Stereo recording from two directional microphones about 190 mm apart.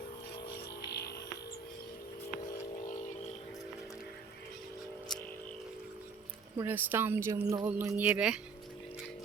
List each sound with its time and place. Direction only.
0.9 s music: 60° left (ahead or behind)
6.6 s speech: 10° right (ahead or behind)